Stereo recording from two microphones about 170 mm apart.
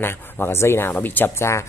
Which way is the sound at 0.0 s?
15° left (ahead or behind).